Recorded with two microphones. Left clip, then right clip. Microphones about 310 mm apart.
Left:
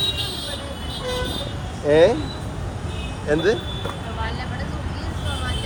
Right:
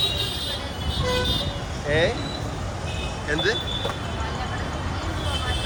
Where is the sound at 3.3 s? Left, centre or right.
Centre.